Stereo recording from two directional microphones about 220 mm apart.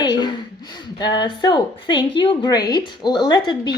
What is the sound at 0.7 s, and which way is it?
A woman's voice, 20° left (ahead or behind).